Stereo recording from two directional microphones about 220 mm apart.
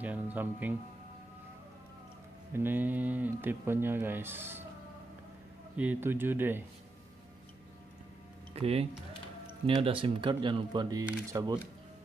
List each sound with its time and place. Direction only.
0.0 s speech: 5° right (ahead or behind)
2.5 s speech: 10° right (ahead or behind)
5.8 s speech: 10° right (ahead or behind)
8.5 s speech: 25° right (ahead or behind)